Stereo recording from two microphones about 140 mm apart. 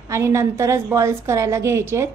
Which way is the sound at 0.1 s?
20° right (ahead or behind).